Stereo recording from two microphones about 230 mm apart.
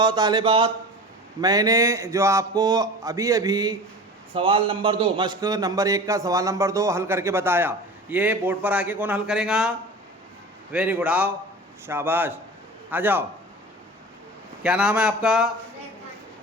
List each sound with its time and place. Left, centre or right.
0.0 s a man's voice: centre
14.6 s speech: centre